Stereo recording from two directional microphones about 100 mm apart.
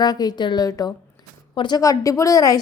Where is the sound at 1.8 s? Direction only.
35° left (ahead or behind).